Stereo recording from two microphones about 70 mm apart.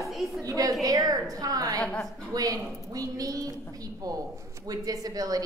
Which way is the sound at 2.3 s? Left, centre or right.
Right.